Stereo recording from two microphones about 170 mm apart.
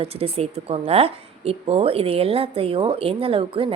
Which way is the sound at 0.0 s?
35° right (ahead or behind).